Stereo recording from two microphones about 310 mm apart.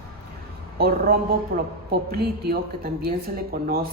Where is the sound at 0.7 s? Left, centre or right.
Right.